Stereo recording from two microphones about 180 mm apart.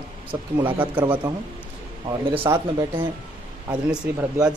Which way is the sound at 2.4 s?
20° right (ahead or behind).